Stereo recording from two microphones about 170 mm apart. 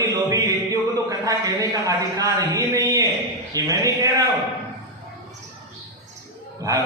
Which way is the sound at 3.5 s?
20° right (ahead or behind).